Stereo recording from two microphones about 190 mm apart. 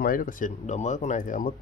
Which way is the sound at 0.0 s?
45° left (ahead or behind).